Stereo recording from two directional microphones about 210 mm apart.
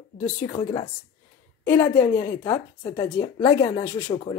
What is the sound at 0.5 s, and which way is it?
Speech, 25° left (ahead or behind).